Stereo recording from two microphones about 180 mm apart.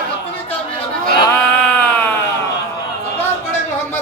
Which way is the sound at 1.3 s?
5° left (ahead or behind).